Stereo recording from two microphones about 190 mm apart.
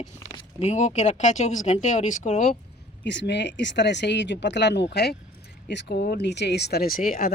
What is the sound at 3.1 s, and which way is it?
Speech, 65° left (ahead or behind).